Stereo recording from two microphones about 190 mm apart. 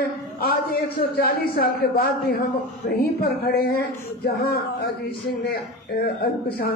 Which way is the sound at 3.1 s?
55° left (ahead or behind).